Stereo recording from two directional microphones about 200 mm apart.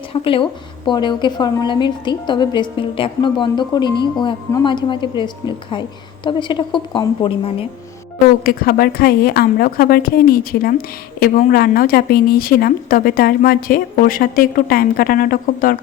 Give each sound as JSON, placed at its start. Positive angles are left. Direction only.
{"t": 0.1, "sound": "a woman's voice", "side_deg": 25}
{"t": 8.4, "sound": "a woman's voice", "side_deg": 50}